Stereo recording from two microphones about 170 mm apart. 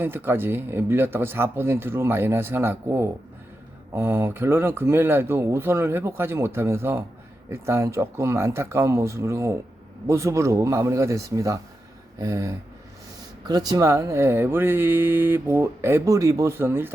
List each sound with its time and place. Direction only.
0.0 s speech: 15° right (ahead or behind)
12.2 s a sound: 20° right (ahead or behind)
13.5 s speech: 25° right (ahead or behind)